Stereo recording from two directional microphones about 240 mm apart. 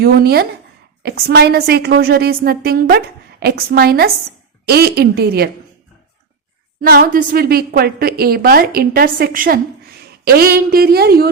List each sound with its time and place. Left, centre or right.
0.0 s a woman's voice: right
6.8 s a woman's voice: right